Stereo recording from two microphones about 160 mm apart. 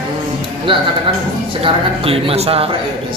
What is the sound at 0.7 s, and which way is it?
A man's voice, 30° right (ahead or behind).